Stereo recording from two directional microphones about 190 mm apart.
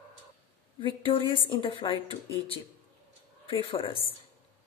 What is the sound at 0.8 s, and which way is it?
A woman's voice, 25° left (ahead or behind).